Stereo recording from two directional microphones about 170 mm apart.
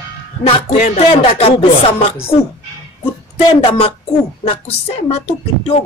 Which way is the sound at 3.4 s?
35° left (ahead or behind).